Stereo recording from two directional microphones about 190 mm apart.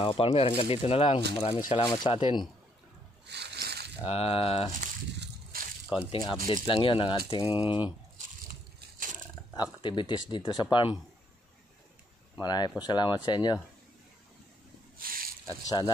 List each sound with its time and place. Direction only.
0.0 s speech: 30° left (ahead or behind)
3.3 s a sound: 60° right (ahead or behind)
4.0 s a sound: 30° left (ahead or behind)
5.1 s a sound: 55° right (ahead or behind)
6.4 s speech: 25° left (ahead or behind)
9.5 s speech: 25° left (ahead or behind)
12.4 s speech: 20° left (ahead or behind)
15.0 s snake: 50° right (ahead or behind)
15.4 s speech: 20° left (ahead or behind)